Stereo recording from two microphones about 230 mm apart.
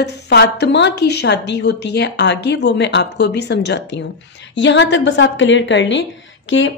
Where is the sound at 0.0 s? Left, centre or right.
Left.